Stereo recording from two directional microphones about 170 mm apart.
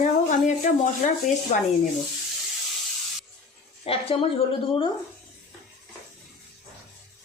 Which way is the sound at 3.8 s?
35° left (ahead or behind).